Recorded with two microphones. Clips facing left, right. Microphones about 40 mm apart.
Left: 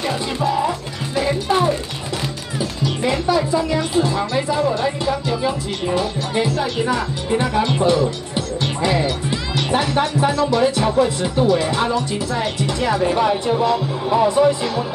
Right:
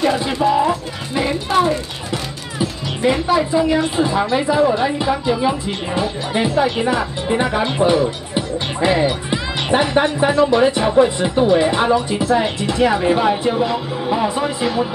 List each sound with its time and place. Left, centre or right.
0.0 s speech: centre